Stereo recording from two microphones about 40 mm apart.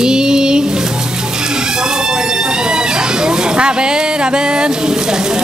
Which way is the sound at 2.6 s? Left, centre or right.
Centre.